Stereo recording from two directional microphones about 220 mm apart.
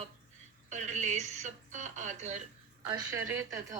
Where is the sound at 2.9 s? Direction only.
15° right (ahead or behind).